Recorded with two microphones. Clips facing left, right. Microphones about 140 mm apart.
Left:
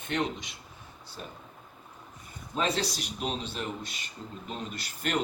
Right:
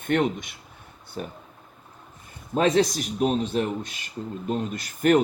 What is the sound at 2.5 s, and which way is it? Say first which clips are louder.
Speech: right 9 dB; 50° right (ahead or behind).